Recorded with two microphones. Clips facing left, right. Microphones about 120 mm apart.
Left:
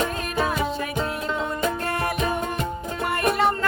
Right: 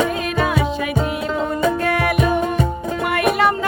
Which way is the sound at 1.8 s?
70° right (ahead or behind).